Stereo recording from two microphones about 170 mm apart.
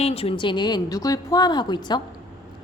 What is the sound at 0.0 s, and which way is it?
A woman's voice, 35° left (ahead or behind).